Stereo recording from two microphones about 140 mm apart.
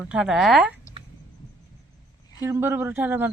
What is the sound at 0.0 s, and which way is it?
Speech, 5° right (ahead or behind).